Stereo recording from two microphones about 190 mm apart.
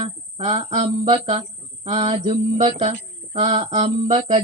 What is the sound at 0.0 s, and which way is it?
Speech, 30° right (ahead or behind).